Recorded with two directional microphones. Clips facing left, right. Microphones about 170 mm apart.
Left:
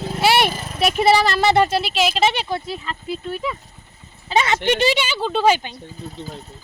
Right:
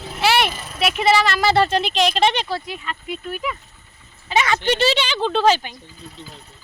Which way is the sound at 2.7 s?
30° left (ahead or behind).